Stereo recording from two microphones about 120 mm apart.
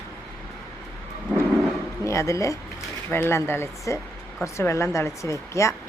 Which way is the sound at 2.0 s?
25° left (ahead or behind).